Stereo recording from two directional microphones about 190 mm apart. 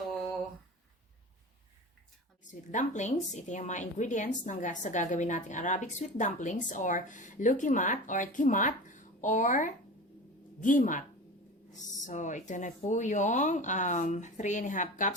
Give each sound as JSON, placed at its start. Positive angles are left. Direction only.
{"t": 2.4, "sound": "a woman's voice", "side_deg": 40}
{"t": 12.0, "sound": "a woman's voice", "side_deg": 40}